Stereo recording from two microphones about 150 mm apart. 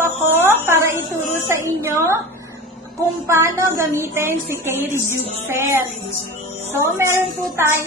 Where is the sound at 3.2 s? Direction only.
20° right (ahead or behind).